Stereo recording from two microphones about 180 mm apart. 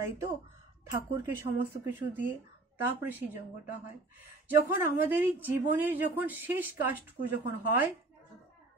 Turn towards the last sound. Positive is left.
turn(degrees=-10)  # may be behind; listen again after turning